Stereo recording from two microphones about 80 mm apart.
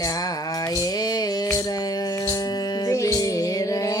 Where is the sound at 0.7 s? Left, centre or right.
Left.